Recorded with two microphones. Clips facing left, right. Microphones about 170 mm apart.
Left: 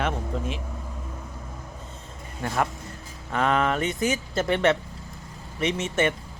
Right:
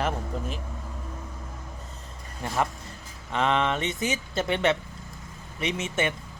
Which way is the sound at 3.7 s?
25° right (ahead or behind).